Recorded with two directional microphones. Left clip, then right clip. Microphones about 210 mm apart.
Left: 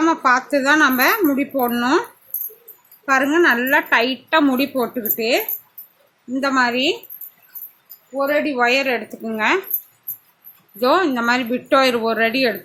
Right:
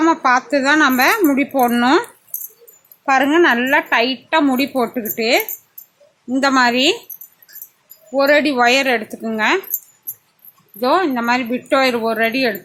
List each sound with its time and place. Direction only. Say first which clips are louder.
0.0 s a woman's voice: right 2 dB; 15° right (ahead or behind)
3.1 s a woman's voice: right 2 dB; 15° right (ahead or behind)
8.1 s a woman's voice: right 5 dB; 40° right (ahead or behind); by 9.6 s 20° right (ahead or behind)
10.8 s a woman's voice: right 1 dB; 5° right (ahead or behind)